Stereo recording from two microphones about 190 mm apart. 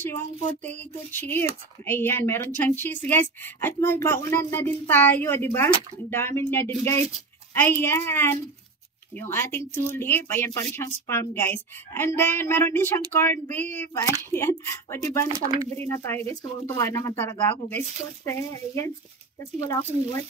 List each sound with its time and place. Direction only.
0.0 s speech: 10° left (ahead or behind)
15.3 s speech: 15° right (ahead or behind)
15.7 s speech: 10° left (ahead or behind)